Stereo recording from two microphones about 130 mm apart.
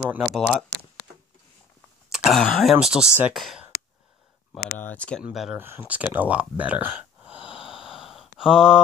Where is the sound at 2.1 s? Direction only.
Centre (ahead or behind).